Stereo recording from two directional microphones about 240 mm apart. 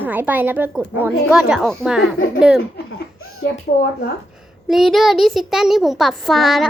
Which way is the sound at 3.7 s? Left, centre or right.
Left.